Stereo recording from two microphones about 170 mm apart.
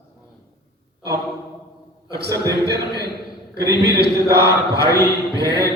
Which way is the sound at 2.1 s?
75° right (ahead or behind).